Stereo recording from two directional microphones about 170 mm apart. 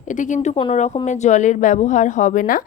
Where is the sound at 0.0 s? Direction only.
50° left (ahead or behind).